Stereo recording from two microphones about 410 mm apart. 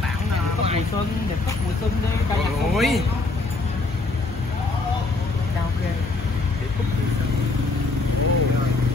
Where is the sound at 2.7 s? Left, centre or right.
Centre.